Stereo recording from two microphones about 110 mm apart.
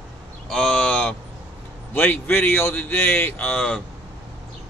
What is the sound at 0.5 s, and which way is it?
Crow, 5° left (ahead or behind).